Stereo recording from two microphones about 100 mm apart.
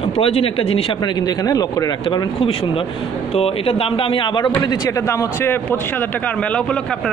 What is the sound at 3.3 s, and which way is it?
A man's voice, 75° left (ahead or behind).